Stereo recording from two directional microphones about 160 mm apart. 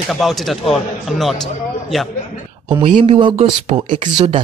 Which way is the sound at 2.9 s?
30° right (ahead or behind).